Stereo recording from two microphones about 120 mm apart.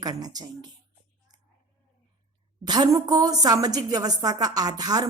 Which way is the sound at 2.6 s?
35° right (ahead or behind).